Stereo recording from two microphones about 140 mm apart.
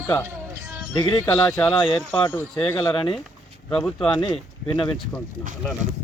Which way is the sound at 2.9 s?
40° left (ahead or behind).